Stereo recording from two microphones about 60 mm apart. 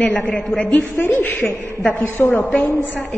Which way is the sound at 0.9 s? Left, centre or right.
Left.